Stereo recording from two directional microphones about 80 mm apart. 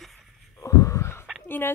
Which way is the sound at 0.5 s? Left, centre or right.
Left.